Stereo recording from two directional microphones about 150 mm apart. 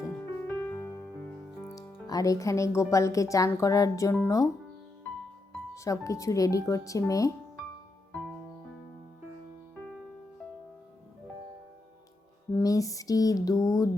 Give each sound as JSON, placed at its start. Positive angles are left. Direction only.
{"t": 0.0, "sound": "music", "side_deg": 15}
{"t": 1.6, "sound": "speech", "side_deg": 20}
{"t": 5.7, "sound": "speech", "side_deg": 20}
{"t": 12.5, "sound": "speech", "side_deg": 20}